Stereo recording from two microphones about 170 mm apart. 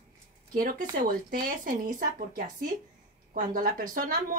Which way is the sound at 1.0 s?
55° right (ahead or behind).